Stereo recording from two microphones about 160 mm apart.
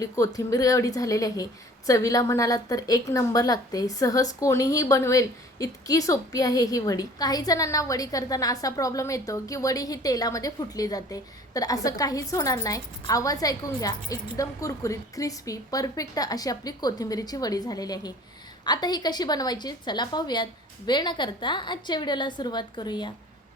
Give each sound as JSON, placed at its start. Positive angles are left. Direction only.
{"t": 0.0, "sound": "a woman's voice", "side_deg": 20}